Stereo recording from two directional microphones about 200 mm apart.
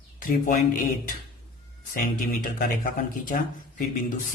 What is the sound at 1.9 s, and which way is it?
Speech, 40° left (ahead or behind).